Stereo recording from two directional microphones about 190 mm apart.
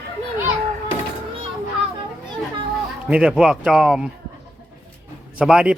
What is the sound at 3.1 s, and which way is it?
A man's voice, 5° right (ahead or behind).